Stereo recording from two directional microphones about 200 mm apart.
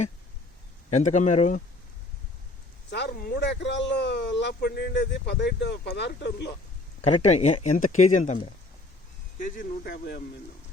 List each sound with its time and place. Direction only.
0.9 s speech: 35° left (ahead or behind)
2.9 s speech: 55° left (ahead or behind)
7.0 s speech: 35° left (ahead or behind)
9.6 s speech: 50° left (ahead or behind)